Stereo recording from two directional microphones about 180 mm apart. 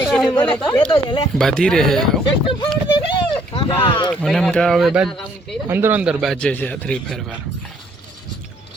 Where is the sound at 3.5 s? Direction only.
30° left (ahead or behind).